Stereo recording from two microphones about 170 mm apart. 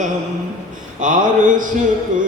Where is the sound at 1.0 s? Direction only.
50° right (ahead or behind).